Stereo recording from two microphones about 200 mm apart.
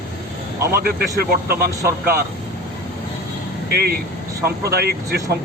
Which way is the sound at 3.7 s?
50° right (ahead or behind).